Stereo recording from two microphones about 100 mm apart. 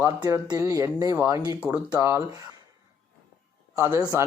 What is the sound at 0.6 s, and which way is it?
Speech, 30° right (ahead or behind).